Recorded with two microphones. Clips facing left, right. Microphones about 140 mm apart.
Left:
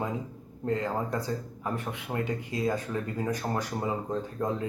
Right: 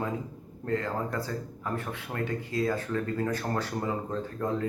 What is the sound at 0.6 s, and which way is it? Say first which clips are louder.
Speech: left 1 dB; 20° left (ahead or behind).